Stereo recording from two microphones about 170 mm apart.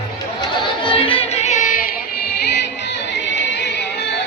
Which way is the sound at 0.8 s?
30° left (ahead or behind).